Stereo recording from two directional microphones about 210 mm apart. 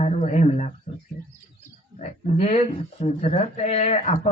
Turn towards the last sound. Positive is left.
turn(degrees=30)  # may be behind; listen again after turning